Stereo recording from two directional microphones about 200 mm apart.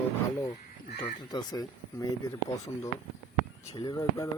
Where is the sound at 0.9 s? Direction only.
30° left (ahead or behind).